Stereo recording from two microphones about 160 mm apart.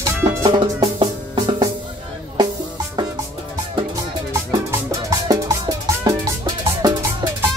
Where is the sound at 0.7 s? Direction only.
30° right (ahead or behind).